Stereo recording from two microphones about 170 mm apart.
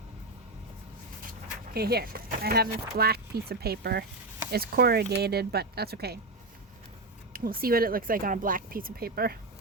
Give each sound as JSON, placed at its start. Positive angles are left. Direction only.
{"t": 1.7, "sound": "speech", "side_deg": -65}
{"t": 7.3, "sound": "speech", "side_deg": -60}